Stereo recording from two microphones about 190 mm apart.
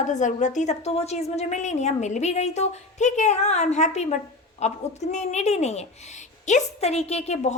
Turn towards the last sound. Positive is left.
turn(degrees=35)  # may be behind; listen again after turning